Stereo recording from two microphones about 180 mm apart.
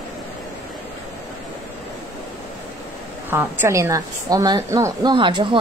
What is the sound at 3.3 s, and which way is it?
A woman's voice, 15° right (ahead or behind).